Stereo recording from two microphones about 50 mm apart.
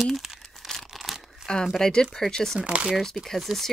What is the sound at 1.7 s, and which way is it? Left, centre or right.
Speech, centre.